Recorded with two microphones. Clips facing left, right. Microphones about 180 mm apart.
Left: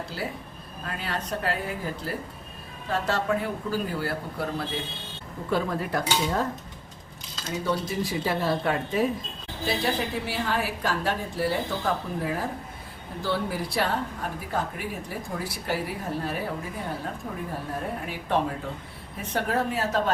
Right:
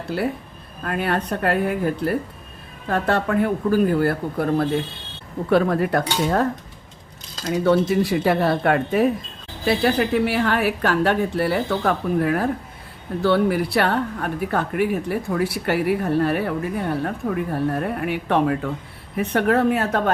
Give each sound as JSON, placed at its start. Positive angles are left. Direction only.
{"t": 0.1, "sound": "speech", "side_deg": -60}
{"t": 5.5, "sound": "speech", "side_deg": -65}
{"t": 7.5, "sound": "speech", "side_deg": -65}